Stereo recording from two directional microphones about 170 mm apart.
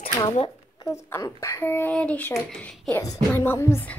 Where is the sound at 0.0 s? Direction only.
35° left (ahead or behind).